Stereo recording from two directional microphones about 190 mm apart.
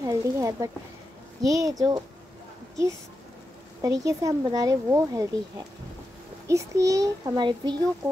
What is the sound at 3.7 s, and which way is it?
Speech, 20° right (ahead or behind).